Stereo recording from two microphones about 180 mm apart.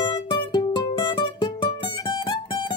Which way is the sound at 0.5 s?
25° left (ahead or behind).